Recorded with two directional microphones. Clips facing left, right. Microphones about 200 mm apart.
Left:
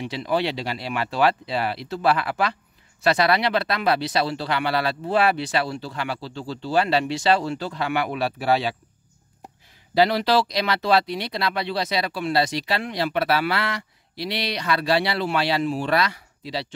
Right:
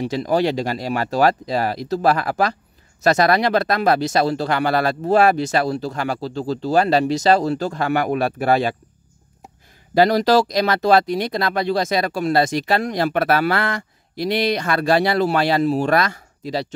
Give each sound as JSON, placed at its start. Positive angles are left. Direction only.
{"t": 0.0, "sound": "speech", "side_deg": -40}
{"t": 9.9, "sound": "speech", "side_deg": -45}